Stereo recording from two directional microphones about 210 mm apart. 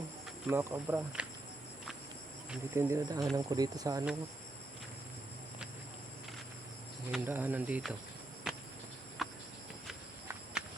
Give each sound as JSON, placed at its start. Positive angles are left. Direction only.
{"t": 0.4, "sound": "speech", "side_deg": -10}
{"t": 2.5, "sound": "speech", "side_deg": -10}
{"t": 7.1, "sound": "speech", "side_deg": -10}
{"t": 8.5, "sound": "insect", "side_deg": 0}
{"t": 9.2, "sound": "cricket", "side_deg": 0}